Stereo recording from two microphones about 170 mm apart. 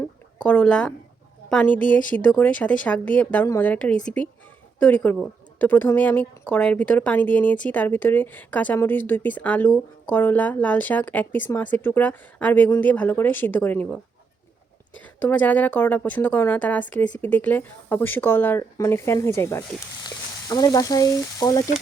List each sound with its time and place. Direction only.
0.4 s speech: 10° left (ahead or behind)
14.9 s speech: 10° left (ahead or behind)
20.1 s frying: 25° left (ahead or behind)